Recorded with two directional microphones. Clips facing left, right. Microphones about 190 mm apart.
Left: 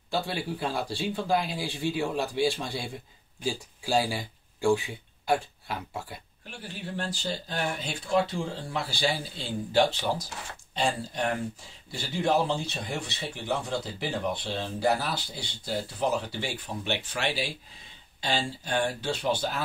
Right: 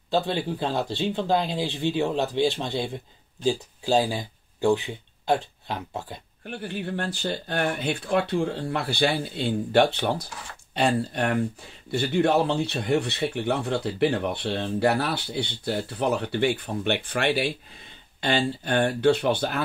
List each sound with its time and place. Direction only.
0.1 s speech: 20° right (ahead or behind)
6.4 s speech: 55° right (ahead or behind)